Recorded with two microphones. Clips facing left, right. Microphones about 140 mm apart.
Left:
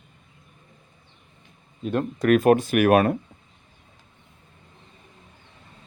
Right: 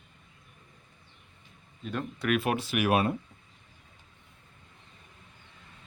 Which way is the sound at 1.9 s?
50° left (ahead or behind).